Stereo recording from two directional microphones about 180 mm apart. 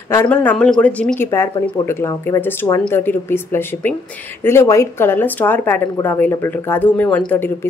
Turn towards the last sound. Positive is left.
turn(degrees=10)  # may be behind; listen again after turning